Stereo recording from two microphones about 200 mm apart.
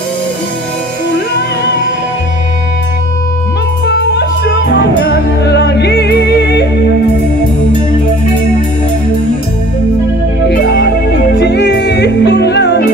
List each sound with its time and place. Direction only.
3.8 s music: 60° left (ahead or behind)
10.5 s music: 55° left (ahead or behind)